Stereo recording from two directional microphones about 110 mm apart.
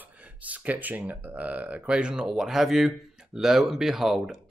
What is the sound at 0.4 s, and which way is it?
Speech, 15° right (ahead or behind).